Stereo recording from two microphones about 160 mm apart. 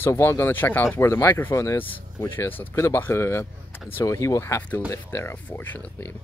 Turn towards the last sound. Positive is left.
turn(degrees=15)  # may be behind; listen again after turning